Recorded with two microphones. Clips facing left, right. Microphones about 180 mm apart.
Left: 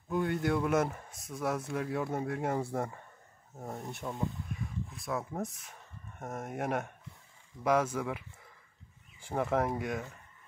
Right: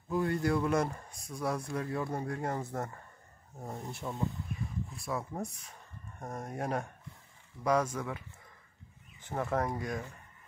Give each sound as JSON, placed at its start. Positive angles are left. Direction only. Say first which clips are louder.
{"t": 0.1, "sound": "speech", "louder": "even", "side_deg": 0}
{"t": 9.2, "sound": "speech", "louder": "left 2 dB", "side_deg": 10}